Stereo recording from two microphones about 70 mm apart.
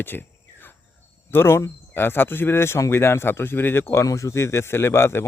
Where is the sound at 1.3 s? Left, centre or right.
Left.